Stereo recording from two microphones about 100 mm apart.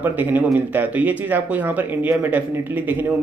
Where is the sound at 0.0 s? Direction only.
20° right (ahead or behind).